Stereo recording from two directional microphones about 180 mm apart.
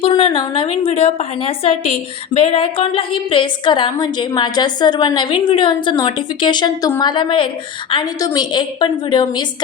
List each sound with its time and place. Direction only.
0.0 s a woman's voice: 25° left (ahead or behind)